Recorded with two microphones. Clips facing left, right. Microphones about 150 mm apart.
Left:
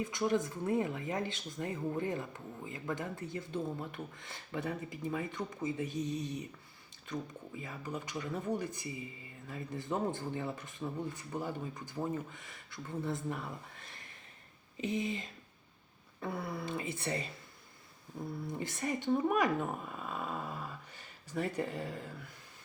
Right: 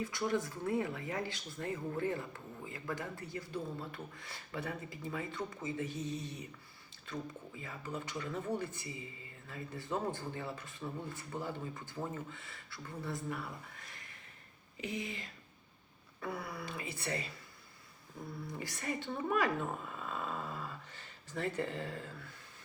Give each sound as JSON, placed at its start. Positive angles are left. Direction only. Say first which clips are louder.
{"t": 0.0, "sound": "speech", "louder": "left 3 dB", "side_deg": 20}
{"t": 7.6, "sound": "speech", "louder": "left 1 dB", "side_deg": 15}
{"t": 14.8, "sound": "speech", "louder": "left 6 dB", "side_deg": 20}
{"t": 16.2, "sound": "speech", "louder": "left 3 dB", "side_deg": 25}
{"t": 18.4, "sound": "speech", "louder": "left 3 dB", "side_deg": 20}